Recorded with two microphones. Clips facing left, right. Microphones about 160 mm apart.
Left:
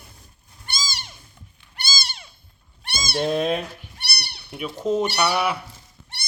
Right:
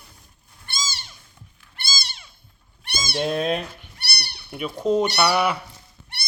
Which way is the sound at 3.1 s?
Centre (ahead or behind).